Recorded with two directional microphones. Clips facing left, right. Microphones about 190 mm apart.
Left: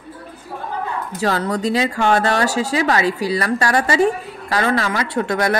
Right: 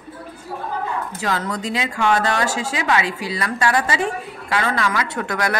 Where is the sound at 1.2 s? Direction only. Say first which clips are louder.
Left 6 dB; 35° left (ahead or behind).